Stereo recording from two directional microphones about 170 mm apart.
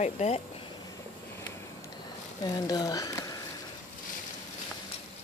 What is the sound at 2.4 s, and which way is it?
Speech, 25° left (ahead or behind).